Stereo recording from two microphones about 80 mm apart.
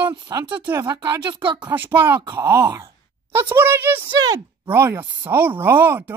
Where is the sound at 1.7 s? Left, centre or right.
Right.